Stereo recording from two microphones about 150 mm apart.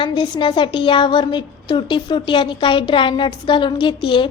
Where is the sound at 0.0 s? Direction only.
30° left (ahead or behind).